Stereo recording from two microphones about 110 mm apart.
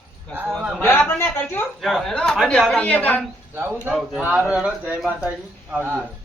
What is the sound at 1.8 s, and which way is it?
A woman's voice, centre (ahead or behind).